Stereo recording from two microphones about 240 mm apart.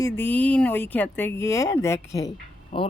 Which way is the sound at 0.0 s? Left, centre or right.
Centre.